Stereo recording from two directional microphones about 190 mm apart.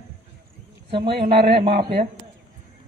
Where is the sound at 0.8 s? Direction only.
30° right (ahead or behind).